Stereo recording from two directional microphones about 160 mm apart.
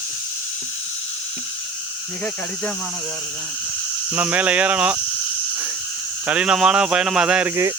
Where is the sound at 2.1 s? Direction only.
10° left (ahead or behind).